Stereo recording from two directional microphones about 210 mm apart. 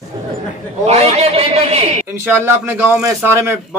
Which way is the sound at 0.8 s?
30° right (ahead or behind).